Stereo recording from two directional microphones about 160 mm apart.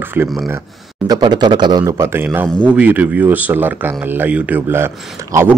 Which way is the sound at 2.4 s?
5° left (ahead or behind).